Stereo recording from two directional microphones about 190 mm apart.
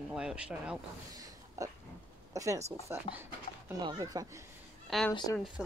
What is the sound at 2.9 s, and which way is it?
Speech, 15° right (ahead or behind).